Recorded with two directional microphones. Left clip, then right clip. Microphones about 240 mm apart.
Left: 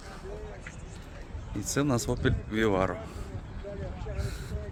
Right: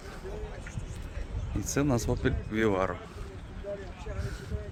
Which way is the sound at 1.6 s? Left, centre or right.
Centre.